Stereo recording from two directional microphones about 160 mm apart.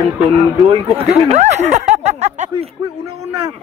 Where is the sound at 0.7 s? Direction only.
40° right (ahead or behind).